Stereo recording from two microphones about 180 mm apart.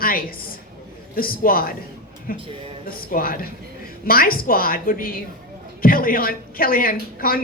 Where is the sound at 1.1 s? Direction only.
55° left (ahead or behind).